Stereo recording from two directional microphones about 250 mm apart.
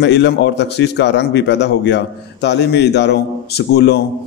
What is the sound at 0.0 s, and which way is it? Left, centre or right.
A man's voice, left.